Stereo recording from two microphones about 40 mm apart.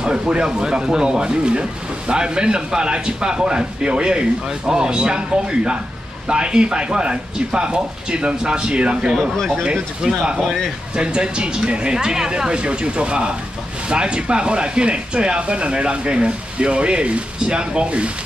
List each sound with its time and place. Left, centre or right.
0.0 s speech: right
10.4 s speech: centre
11.0 s speech: right